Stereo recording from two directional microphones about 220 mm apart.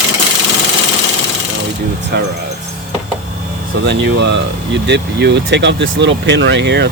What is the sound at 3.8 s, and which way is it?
Speech, 50° right (ahead or behind).